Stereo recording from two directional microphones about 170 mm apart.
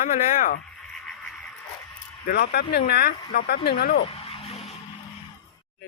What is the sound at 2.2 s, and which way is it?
Speech, 65° left (ahead or behind).